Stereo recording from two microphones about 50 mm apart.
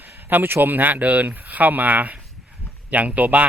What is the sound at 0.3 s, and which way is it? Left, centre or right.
Speech, right.